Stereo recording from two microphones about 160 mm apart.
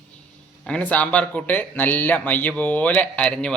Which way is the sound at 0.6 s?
5° left (ahead or behind).